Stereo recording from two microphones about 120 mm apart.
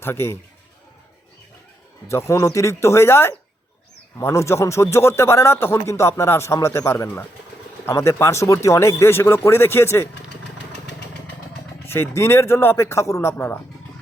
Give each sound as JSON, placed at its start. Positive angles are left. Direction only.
{"t": 0.0, "sound": "speech", "side_deg": 20}
{"t": 2.0, "sound": "speech", "side_deg": 25}
{"t": 11.9, "sound": "speech", "side_deg": 20}